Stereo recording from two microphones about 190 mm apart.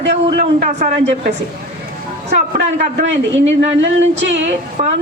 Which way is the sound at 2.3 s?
40° right (ahead or behind).